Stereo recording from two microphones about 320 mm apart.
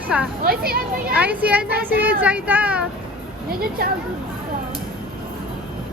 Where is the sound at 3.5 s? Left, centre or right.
Right.